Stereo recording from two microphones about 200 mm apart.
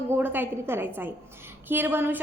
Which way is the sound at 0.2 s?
10° right (ahead or behind).